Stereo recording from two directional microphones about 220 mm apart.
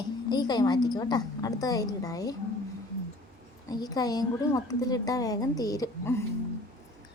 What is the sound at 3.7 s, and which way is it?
A woman's voice, 15° left (ahead or behind).